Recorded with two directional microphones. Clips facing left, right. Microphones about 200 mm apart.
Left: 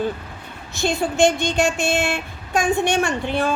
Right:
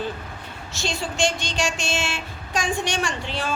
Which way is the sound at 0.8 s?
60° left (ahead or behind).